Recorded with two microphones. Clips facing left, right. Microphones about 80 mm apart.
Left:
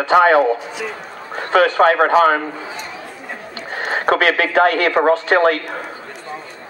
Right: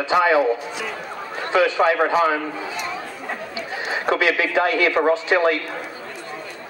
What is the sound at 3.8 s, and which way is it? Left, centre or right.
Speech, left.